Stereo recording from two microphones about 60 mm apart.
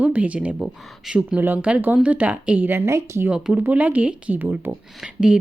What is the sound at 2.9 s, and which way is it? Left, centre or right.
Speech, right.